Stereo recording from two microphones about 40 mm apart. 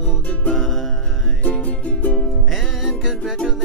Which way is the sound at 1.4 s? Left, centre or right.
Left.